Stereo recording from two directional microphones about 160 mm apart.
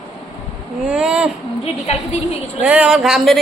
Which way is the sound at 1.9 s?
40° left (ahead or behind).